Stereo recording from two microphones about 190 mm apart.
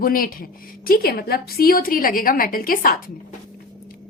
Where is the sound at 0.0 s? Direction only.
50° left (ahead or behind).